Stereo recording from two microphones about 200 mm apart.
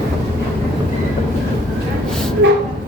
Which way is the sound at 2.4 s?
70° right (ahead or behind).